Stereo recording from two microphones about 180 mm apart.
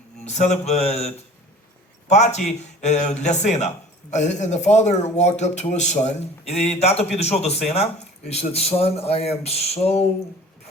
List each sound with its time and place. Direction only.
0.3 s speech: 40° left (ahead or behind)